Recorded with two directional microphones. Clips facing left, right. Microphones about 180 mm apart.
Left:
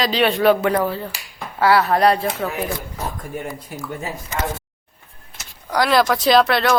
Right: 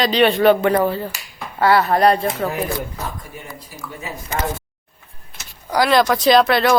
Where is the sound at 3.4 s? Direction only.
50° left (ahead or behind).